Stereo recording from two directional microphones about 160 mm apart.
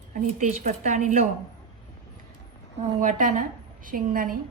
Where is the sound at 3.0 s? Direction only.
55° right (ahead or behind).